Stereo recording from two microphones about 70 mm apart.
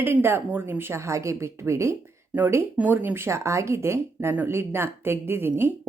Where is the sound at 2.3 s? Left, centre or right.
Right.